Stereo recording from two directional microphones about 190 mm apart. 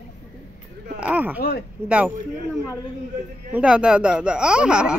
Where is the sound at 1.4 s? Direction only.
55° left (ahead or behind).